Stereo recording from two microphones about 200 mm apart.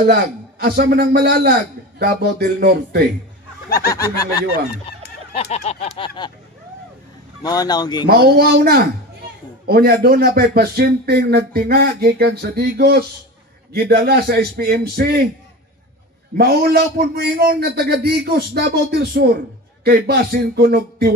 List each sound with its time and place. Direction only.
0.0 s speech: 50° right (ahead or behind)
3.6 s snicker: 50° left (ahead or behind)
3.9 s a sound: 15° left (ahead or behind)
5.3 s a sound: 30° left (ahead or behind)
7.4 s speech: 20° left (ahead or behind)
8.1 s speech: 50° right (ahead or behind)
16.3 s speech: 50° right (ahead or behind)